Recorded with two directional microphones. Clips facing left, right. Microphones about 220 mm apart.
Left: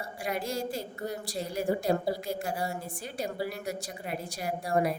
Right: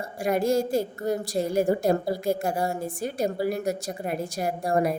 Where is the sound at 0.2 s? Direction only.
45° right (ahead or behind).